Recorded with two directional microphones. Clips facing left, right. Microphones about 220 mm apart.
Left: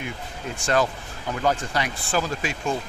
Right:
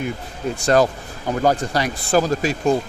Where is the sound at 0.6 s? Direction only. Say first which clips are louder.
Right 6 dB; 40° right (ahead or behind).